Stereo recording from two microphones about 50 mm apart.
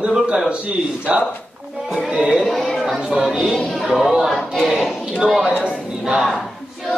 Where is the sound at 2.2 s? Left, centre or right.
Centre.